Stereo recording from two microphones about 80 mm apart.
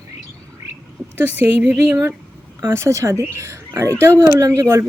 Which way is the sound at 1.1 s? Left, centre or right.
Right.